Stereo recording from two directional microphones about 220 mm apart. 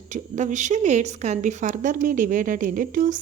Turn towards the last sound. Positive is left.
turn(degrees=-40)  # may be behind; listen again after turning